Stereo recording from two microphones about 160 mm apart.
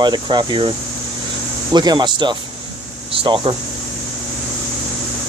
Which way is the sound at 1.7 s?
25° right (ahead or behind).